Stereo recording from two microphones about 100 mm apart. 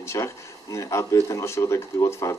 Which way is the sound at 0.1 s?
35° left (ahead or behind).